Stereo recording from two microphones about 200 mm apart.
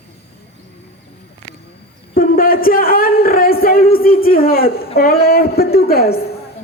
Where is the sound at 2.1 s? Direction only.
45° left (ahead or behind).